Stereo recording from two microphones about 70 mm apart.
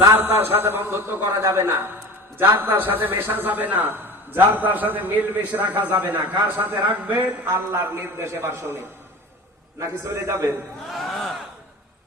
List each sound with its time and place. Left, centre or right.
0.4 s a man's voice: right
9.8 s a man's voice: right
10.8 s a sound: centre